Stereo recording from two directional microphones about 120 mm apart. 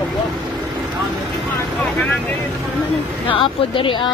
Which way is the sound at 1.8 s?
15° left (ahead or behind).